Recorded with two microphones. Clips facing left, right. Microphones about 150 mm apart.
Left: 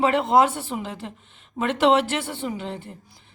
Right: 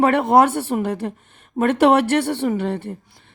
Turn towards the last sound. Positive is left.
turn(degrees=-60)  # may be behind; listen again after turning